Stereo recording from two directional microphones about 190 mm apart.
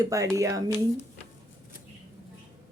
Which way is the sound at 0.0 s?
15° right (ahead or behind).